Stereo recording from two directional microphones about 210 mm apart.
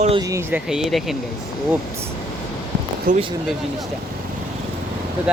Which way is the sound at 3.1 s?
40° right (ahead or behind).